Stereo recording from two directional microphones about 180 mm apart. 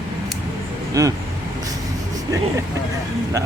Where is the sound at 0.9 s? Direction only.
15° right (ahead or behind).